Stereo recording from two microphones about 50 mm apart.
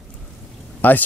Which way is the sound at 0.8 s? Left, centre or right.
Left.